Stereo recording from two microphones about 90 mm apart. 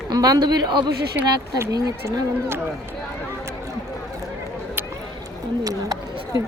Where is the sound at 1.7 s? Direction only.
45° right (ahead or behind).